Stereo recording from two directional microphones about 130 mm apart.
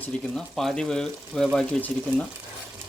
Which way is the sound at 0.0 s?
5° left (ahead or behind).